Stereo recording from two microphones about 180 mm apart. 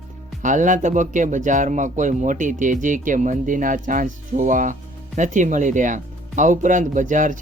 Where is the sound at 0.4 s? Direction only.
45° right (ahead or behind).